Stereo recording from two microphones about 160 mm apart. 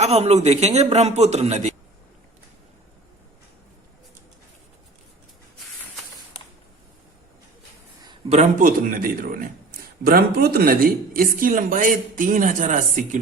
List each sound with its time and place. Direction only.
0.0 s a man's voice: 40° right (ahead or behind)
8.3 s speech: 50° right (ahead or behind)